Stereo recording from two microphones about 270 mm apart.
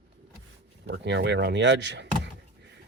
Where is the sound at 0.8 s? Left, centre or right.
Right.